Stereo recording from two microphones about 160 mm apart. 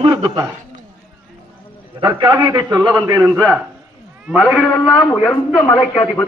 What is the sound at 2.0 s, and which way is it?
A man's voice, 30° right (ahead or behind).